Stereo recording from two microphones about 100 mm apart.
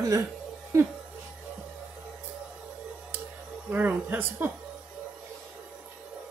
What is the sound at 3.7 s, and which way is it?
Speech, 15° right (ahead or behind).